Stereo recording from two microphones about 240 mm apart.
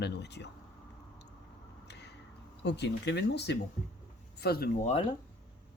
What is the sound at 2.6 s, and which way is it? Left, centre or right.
Speech, left.